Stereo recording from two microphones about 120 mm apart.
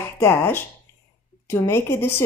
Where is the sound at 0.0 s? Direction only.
20° left (ahead or behind).